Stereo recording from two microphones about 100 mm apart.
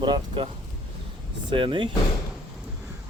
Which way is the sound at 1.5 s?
55° right (ahead or behind).